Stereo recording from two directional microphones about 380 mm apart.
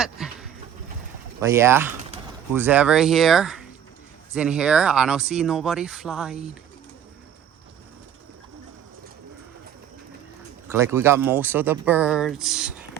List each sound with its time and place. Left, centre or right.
0.0 s goat: centre
1.4 s speech: centre
10.7 s speech: centre